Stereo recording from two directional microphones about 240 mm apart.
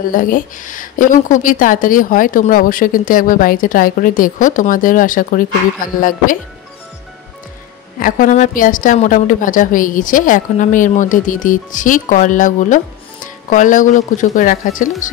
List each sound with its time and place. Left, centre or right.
0.1 s a woman's voice: left
8.0 s a woman's voice: left